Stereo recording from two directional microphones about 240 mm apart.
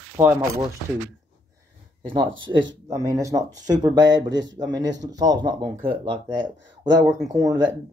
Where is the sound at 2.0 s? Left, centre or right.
Right.